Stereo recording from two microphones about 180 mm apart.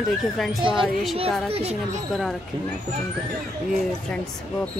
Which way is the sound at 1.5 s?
35° right (ahead or behind).